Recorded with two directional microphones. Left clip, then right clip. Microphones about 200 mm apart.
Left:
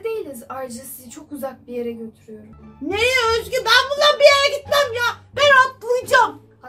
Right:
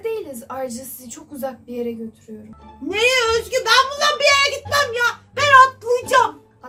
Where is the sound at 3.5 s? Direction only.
25° left (ahead or behind).